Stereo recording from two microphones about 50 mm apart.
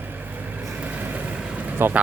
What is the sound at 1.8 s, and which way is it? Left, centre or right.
Speech, right.